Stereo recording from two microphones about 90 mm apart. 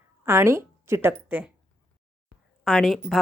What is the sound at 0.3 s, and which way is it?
A woman's voice, 30° right (ahead or behind).